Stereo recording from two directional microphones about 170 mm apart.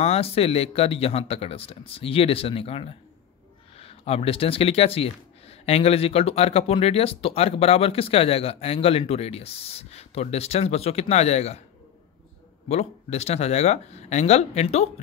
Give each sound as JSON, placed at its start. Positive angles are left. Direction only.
{"t": 0.0, "sound": "speech", "side_deg": 35}
{"t": 12.6, "sound": "speech", "side_deg": 40}